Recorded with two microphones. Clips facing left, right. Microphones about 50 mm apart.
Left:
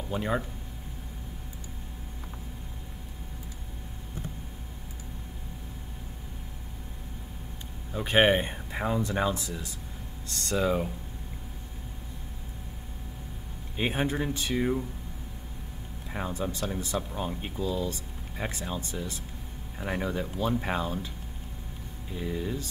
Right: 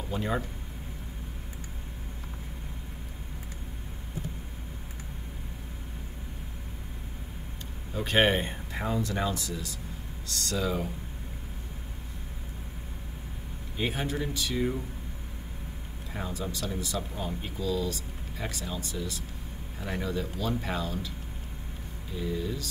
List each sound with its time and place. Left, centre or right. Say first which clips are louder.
0.1 s speech: left 1 dB; centre
7.9 s speech: left 2 dB; centre
13.7 s speech: left 3 dB; left
16.1 s speech: left 3 dB; left
22.2 s speech: even; left